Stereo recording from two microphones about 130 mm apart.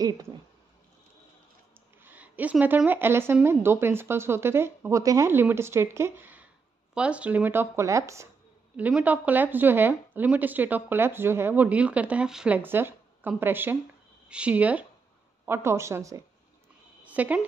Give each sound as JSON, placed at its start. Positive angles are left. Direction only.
{"t": 2.0, "sound": "a sound", "side_deg": -15}
{"t": 2.6, "sound": "a woman's voice", "side_deg": -15}
{"t": 8.7, "sound": "a woman's voice", "side_deg": -10}
{"t": 17.0, "sound": "speech", "side_deg": -10}